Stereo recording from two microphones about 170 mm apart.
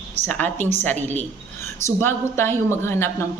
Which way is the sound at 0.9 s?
40° right (ahead or behind).